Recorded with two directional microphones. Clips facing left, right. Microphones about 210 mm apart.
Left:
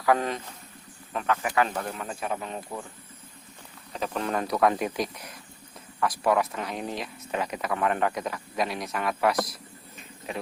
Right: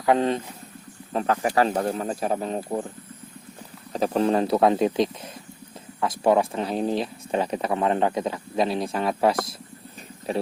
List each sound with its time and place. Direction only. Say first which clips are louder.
0.0 s speech: right 4 dB; 25° right (ahead or behind)
3.9 s speech: right 8 dB; 35° right (ahead or behind)